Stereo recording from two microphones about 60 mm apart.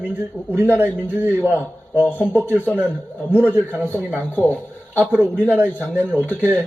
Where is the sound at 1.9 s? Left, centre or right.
Left.